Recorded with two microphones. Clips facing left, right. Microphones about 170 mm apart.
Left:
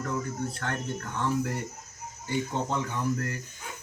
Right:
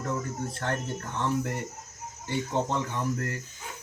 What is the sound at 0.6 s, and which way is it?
Speech, 25° right (ahead or behind).